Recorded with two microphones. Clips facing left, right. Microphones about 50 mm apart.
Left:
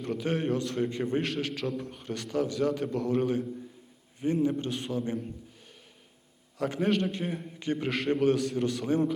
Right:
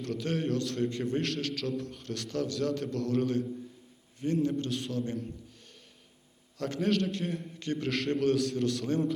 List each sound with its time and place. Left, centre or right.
0.0 s a man's voice: centre
6.6 s a man's voice: centre